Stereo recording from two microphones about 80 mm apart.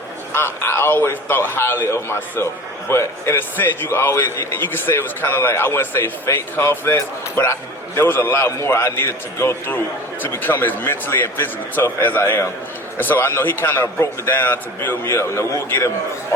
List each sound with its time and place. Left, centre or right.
0.3 s a man's voice: left